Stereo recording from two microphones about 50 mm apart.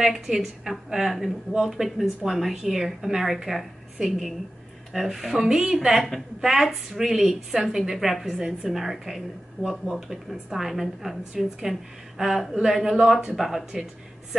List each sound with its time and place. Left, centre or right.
0.0 s a woman's voice: centre